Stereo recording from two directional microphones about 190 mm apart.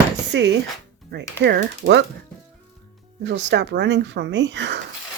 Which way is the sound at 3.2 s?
70° right (ahead or behind).